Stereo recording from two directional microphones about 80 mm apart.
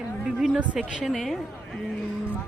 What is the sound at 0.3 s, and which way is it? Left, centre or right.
Speech, centre.